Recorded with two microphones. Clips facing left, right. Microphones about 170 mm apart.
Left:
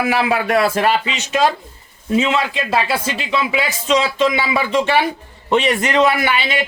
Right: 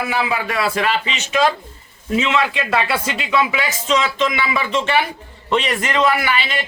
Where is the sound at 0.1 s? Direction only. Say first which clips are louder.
Left 5 dB; 65° left (ahead or behind); by 1.4 s 45° left (ahead or behind).